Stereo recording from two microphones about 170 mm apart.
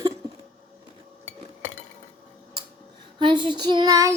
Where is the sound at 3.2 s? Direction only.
30° right (ahead or behind).